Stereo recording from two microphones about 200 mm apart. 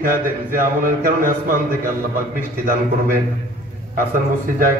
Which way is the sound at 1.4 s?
45° right (ahead or behind).